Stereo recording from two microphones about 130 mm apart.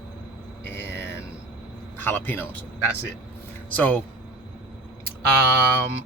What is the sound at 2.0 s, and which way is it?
Speech, 15° left (ahead or behind).